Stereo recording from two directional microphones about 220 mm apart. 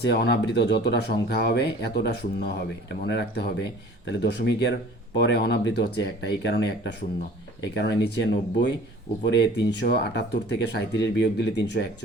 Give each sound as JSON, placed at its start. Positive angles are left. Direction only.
{"t": 0.0, "sound": "speech", "side_deg": 50}